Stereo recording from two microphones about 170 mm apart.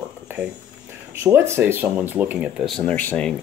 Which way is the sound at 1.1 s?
15° right (ahead or behind).